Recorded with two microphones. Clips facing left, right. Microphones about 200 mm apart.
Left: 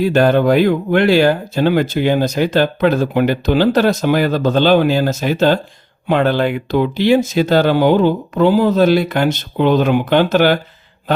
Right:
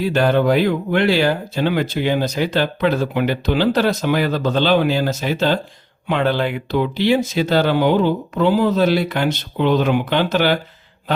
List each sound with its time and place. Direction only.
0.0 s speech: 45° left (ahead or behind)